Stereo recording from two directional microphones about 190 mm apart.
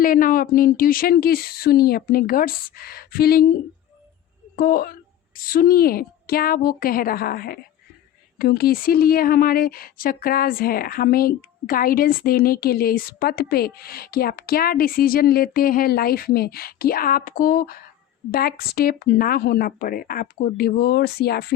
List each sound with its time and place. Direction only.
0.0 s speech: 45° left (ahead or behind)
4.5 s speech: 50° left (ahead or behind)